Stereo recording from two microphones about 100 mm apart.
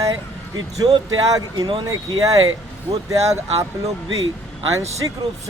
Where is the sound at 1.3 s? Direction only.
45° right (ahead or behind).